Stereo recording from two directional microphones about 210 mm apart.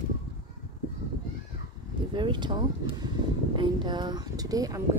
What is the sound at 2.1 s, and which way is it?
Speech, 20° right (ahead or behind).